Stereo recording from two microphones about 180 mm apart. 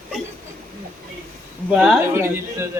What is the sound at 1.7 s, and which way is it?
Speech, 5° right (ahead or behind).